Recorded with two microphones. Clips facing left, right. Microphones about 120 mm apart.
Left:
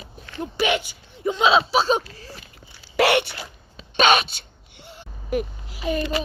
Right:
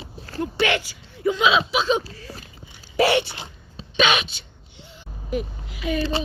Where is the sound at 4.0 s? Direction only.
40° left (ahead or behind).